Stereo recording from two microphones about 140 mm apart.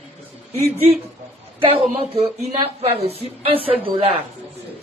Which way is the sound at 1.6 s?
45° right (ahead or behind).